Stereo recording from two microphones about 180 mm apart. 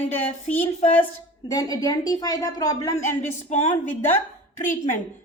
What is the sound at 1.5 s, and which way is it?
A woman's voice, 20° left (ahead or behind).